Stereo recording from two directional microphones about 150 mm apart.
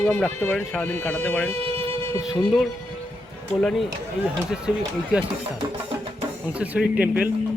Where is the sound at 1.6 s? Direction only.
40° right (ahead or behind).